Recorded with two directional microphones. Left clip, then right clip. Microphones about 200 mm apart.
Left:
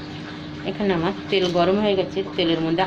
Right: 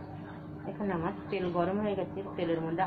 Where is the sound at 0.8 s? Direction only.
70° left (ahead or behind).